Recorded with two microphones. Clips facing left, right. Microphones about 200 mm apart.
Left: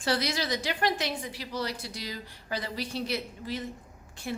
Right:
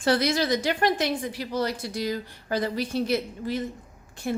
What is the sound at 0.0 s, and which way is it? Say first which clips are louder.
A woman's voice: right 6 dB; 50° right (ahead or behind).